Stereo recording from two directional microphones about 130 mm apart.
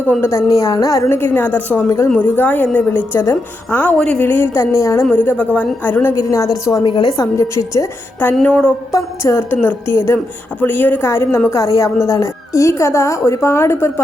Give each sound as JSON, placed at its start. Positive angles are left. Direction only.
{"t": 0.1, "sound": "a woman's voice", "side_deg": 20}
{"t": 1.1, "sound": "a woman's voice", "side_deg": 15}
{"t": 7.2, "sound": "a woman's voice", "side_deg": 25}
{"t": 8.4, "sound": "a woman's voice", "side_deg": 5}
{"t": 8.9, "sound": "a woman's voice", "side_deg": 25}